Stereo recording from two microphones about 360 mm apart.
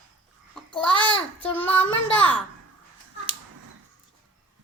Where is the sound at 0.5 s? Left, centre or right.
Centre.